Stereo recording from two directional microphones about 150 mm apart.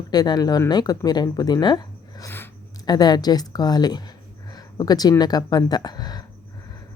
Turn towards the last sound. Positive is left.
turn(degrees=25)  # may be behind; listen again after turning